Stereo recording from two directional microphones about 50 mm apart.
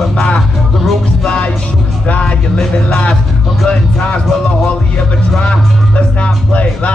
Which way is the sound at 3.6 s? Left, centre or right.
Centre.